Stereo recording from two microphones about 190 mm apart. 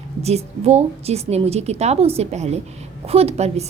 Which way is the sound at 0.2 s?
35° right (ahead or behind).